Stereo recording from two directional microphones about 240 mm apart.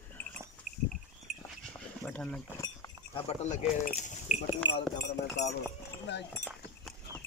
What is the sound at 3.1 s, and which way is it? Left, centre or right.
Speech, left.